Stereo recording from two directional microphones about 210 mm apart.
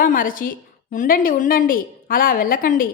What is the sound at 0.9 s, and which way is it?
A woman's voice, 40° left (ahead or behind).